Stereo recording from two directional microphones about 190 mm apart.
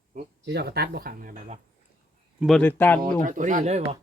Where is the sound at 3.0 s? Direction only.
45° right (ahead or behind).